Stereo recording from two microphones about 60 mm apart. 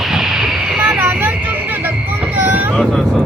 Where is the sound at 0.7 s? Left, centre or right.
Right.